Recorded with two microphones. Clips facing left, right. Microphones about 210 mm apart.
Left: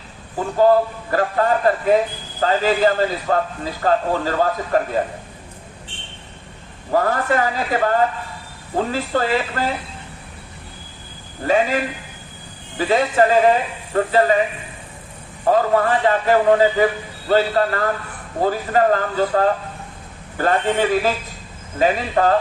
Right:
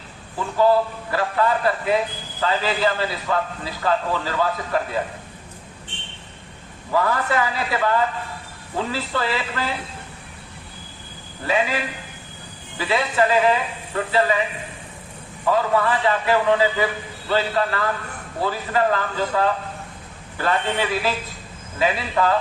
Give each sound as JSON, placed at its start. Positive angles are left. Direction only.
{"t": 0.3, "sound": "a man's voice", "side_deg": 45}
{"t": 6.9, "sound": "a man's voice", "side_deg": 45}
{"t": 11.4, "sound": "a man's voice", "side_deg": 45}
{"t": 12.8, "sound": "a man's voice", "side_deg": 45}
{"t": 15.4, "sound": "a man's voice", "side_deg": 45}